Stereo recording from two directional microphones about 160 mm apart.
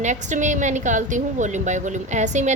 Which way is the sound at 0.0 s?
50° right (ahead or behind).